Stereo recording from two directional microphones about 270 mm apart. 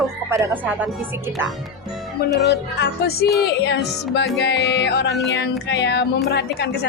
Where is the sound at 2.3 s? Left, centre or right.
Left.